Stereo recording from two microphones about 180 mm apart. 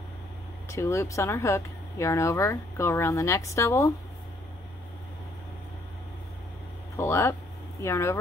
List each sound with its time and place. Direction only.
0.7 s speech: 15° left (ahead or behind)
7.0 s speech: 15° left (ahead or behind)